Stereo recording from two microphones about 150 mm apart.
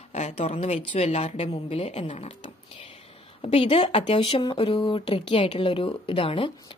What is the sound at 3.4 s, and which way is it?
Speech, 40° left (ahead or behind).